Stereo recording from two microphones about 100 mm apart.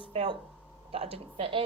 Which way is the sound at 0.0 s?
65° right (ahead or behind).